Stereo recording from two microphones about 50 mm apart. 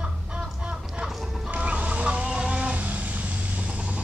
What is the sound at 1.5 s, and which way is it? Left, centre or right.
Vehicle, right.